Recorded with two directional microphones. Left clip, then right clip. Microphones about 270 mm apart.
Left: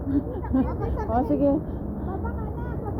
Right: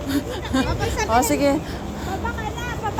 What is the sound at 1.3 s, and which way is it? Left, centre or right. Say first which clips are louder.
Speech: right 3 dB; centre.